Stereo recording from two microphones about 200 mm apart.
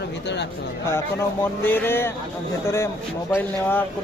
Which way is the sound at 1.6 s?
10° left (ahead or behind).